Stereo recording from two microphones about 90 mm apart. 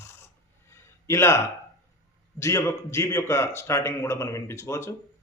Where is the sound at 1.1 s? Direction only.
30° left (ahead or behind).